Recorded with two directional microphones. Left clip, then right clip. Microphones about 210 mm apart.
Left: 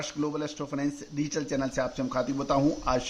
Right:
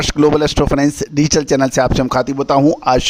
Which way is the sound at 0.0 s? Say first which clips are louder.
Right 19 dB; 50° right (ahead or behind).